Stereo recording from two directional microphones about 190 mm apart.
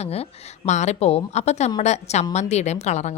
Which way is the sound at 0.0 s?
35° left (ahead or behind).